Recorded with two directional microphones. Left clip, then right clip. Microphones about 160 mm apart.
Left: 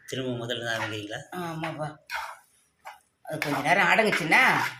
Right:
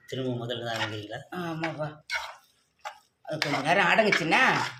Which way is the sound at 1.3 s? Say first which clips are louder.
Right 3 dB; 25° right (ahead or behind).